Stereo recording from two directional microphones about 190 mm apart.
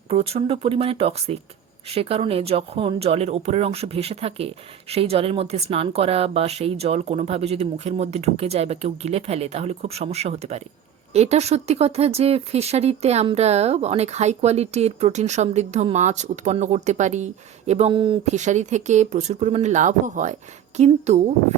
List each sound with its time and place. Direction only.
0.1 s speech: 30° right (ahead or behind)
18.3 s speech: 40° right (ahead or behind)